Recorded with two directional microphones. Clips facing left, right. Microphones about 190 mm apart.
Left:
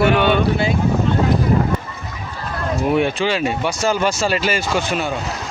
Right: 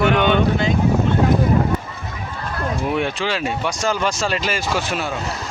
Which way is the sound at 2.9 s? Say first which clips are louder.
Left 6 dB; centre (ahead or behind).